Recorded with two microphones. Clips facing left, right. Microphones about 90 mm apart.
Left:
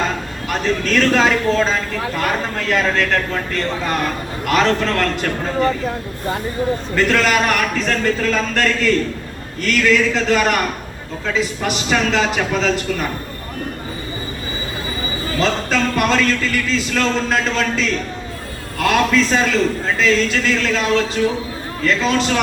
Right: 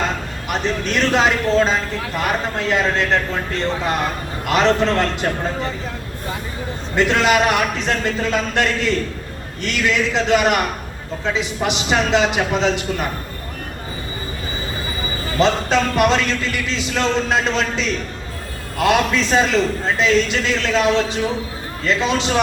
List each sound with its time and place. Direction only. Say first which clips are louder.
0.4 s speech: left 2 dB; 20° right (ahead or behind)
6.9 s speech: right 2 dB; 20° right (ahead or behind)
15.4 s speech: right 2 dB; 20° right (ahead or behind)